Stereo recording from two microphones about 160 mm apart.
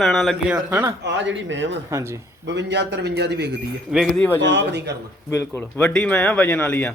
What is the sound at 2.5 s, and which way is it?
A man's voice, 90° right.